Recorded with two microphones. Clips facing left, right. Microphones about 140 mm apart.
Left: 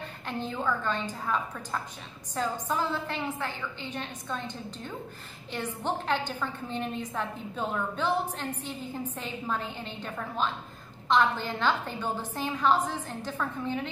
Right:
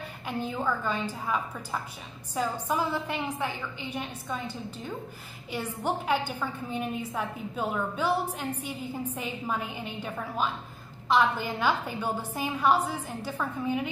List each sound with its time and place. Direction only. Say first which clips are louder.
0.3 s a woman's voice: right 1 dB; 10° right (ahead or behind)